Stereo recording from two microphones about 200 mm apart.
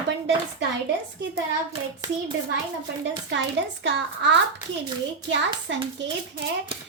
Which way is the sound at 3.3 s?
60° right (ahead or behind).